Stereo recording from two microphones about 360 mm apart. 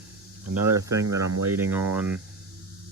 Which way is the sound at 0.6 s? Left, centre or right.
Right.